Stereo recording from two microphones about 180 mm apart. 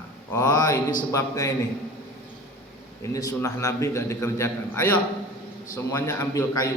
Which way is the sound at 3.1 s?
15° left (ahead or behind).